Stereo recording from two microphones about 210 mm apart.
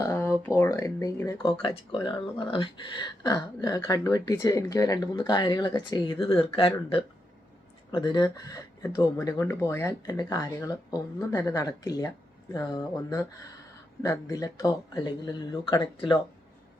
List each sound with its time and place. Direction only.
0.0 s speech: 10° left (ahead or behind)